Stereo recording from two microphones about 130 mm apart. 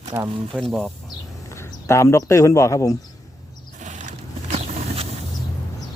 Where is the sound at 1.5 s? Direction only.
20° left (ahead or behind).